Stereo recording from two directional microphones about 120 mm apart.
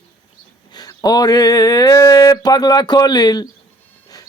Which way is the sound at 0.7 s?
35° left (ahead or behind).